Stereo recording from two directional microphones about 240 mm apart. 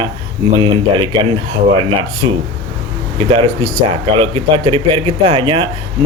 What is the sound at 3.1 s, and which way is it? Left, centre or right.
Speech, right.